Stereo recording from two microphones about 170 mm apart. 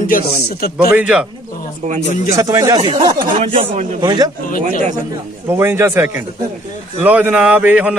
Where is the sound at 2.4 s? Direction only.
20° right (ahead or behind).